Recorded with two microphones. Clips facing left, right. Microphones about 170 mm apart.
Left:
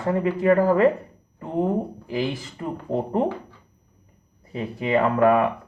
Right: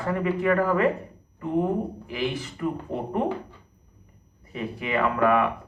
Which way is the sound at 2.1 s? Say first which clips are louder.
Left 4 dB; 30° left (ahead or behind).